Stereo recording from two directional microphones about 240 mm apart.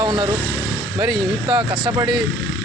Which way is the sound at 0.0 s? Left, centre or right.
Centre.